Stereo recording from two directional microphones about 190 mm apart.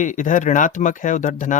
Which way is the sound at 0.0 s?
40° left (ahead or behind).